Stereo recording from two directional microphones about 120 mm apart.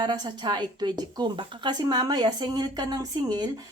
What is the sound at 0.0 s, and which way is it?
A woman's voice, 35° right (ahead or behind).